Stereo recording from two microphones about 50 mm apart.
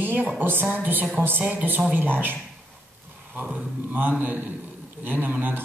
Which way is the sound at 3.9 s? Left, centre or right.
Right.